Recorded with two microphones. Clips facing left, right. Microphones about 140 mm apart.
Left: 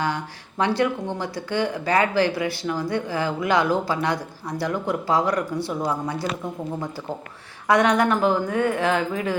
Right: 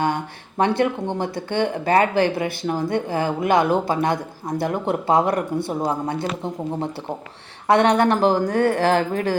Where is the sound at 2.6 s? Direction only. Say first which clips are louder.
Right 3 dB; 45° right (ahead or behind).